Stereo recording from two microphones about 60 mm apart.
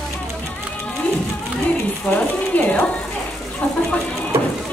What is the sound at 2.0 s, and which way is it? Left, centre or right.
Speech, left.